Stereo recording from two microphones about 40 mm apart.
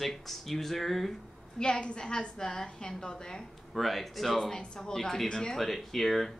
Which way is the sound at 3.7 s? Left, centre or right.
Centre.